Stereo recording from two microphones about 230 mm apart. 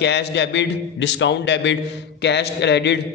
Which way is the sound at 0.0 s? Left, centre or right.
Left.